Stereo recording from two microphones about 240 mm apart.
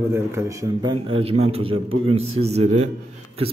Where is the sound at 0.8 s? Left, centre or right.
Right.